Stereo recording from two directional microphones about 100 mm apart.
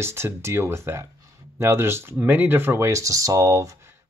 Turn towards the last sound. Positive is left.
turn(degrees=-35)  # may be behind; listen again after turning